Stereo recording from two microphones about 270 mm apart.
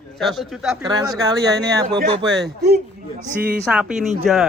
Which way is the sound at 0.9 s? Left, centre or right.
Centre.